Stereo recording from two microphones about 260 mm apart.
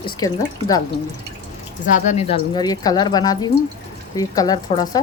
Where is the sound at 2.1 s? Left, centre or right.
Left.